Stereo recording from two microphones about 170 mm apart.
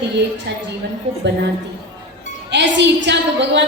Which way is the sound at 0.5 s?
85° right.